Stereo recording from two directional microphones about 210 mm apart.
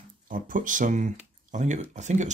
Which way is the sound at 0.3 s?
40° right (ahead or behind).